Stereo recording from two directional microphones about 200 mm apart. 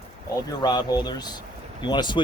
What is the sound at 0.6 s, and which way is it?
Speech, 20° left (ahead or behind).